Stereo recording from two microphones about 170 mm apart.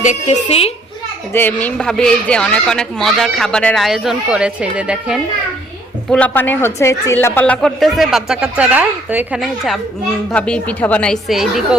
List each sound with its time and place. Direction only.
0.0 s a woman's voice: 45° left (ahead or behind)
1.3 s speech: 10° left (ahead or behind); by 5.2 s 5° right (ahead or behind)
6.1 s speech: 10° left (ahead or behind)